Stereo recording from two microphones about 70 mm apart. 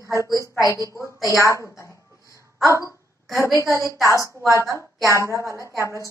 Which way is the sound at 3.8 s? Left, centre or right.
Left.